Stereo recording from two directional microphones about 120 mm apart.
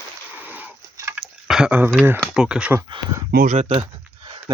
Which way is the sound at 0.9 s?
20° right (ahead or behind).